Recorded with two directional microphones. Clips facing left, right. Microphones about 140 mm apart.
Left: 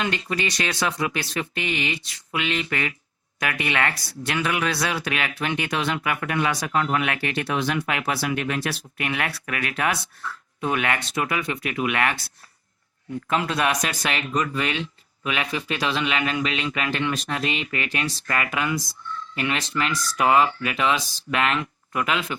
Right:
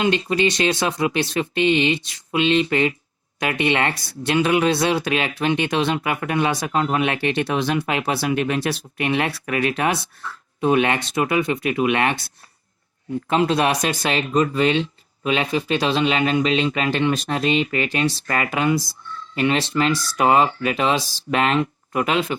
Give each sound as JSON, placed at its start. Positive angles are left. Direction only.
{"t": 0.0, "sound": "speech", "side_deg": -25}